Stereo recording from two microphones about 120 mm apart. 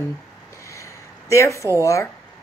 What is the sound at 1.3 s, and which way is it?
Speech, 25° left (ahead or behind).